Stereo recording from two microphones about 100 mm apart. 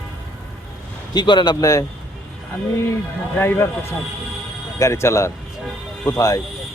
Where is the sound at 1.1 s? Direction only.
50° left (ahead or behind).